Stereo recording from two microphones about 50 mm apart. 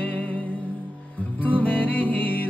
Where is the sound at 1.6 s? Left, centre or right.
Left.